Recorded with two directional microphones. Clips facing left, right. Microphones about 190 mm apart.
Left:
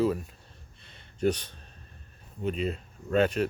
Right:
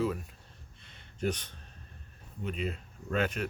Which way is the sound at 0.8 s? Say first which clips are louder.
Left 6 dB; 35° left (ahead or behind).